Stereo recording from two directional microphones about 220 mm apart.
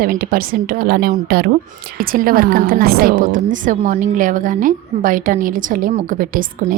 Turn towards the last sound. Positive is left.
turn(degrees=-40)  # may be behind; listen again after turning